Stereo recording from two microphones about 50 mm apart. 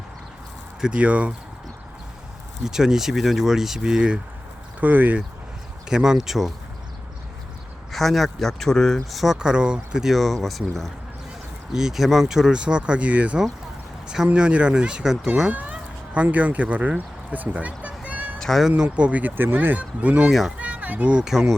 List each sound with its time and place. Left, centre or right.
0.9 s speech: right
2.6 s speech: centre
4.8 s speech: right
5.9 s speech: centre
7.9 s speech: centre
10.1 s speech: centre
11.7 s speech: centre
15.7 s cat: right
18.3 s cat: centre
18.8 s speech: right
19.2 s speech: right
19.5 s speech: right
20.6 s children playing: right